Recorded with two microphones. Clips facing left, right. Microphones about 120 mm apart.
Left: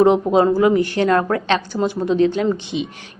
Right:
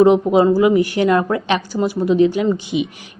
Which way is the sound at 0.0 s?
5° right (ahead or behind).